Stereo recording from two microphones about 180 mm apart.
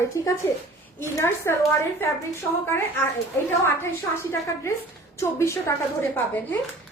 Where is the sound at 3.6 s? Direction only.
15° left (ahead or behind).